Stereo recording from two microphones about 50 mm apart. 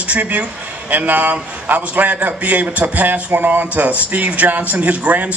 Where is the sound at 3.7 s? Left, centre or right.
Right.